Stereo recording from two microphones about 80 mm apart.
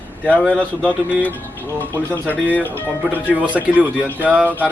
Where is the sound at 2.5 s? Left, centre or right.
Left.